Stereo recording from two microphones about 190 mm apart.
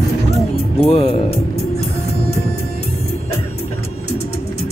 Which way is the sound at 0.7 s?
30° left (ahead or behind).